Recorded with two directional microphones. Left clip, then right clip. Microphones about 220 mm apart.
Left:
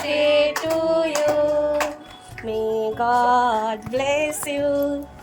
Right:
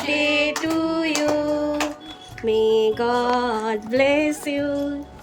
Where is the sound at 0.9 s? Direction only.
10° right (ahead or behind).